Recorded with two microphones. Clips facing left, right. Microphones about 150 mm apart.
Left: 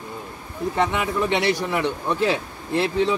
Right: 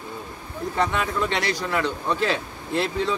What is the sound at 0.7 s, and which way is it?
Speech, 15° left (ahead or behind).